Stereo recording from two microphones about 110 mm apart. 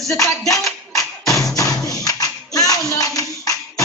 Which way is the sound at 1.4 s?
35° left (ahead or behind).